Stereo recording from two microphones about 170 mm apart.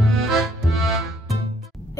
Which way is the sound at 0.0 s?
Centre (ahead or behind).